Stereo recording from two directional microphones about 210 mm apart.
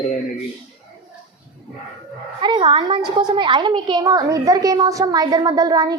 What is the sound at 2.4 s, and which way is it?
A woman's voice, 25° right (ahead or behind).